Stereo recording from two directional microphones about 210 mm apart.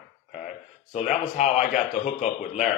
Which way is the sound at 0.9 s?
35° left (ahead or behind).